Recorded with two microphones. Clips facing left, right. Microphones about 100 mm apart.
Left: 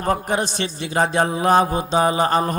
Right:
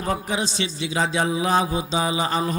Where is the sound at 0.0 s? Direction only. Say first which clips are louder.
Left 4 dB; 55° left (ahead or behind).